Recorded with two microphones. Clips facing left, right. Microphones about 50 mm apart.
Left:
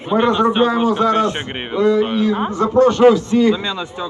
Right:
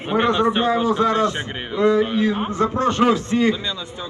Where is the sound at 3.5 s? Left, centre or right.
Left.